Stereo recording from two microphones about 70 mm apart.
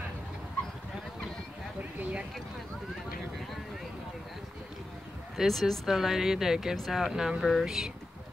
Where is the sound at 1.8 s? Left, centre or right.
Right.